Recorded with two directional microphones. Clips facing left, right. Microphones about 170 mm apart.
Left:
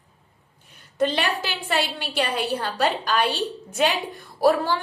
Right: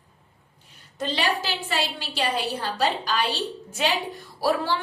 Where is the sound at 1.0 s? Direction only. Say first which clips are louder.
Left 3 dB; 55° left (ahead or behind).